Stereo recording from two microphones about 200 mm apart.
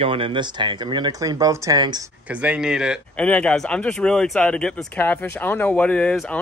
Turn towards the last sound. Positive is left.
turn(degrees=5)  # may be behind; listen again after turning